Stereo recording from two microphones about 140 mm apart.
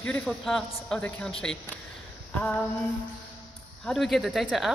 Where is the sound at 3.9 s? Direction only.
Centre (ahead or behind).